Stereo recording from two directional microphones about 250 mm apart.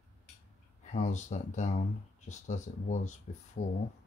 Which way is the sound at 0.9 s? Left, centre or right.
Left.